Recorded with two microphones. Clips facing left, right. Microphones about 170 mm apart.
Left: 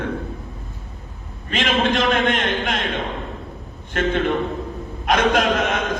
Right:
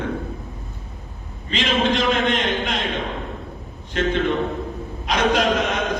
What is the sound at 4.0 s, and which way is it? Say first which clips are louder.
Speech: even; 50° left (ahead or behind).